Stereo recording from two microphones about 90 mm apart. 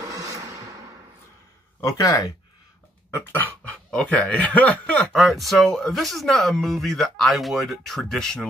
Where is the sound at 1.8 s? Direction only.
35° left (ahead or behind).